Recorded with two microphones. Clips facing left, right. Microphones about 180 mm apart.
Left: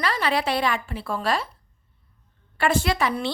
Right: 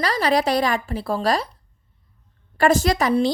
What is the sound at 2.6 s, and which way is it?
Speech, 40° right (ahead or behind).